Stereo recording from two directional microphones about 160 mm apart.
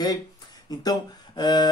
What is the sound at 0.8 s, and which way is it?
Speech, 25° left (ahead or behind).